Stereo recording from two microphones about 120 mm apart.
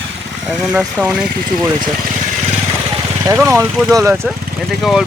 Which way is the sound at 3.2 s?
25° right (ahead or behind).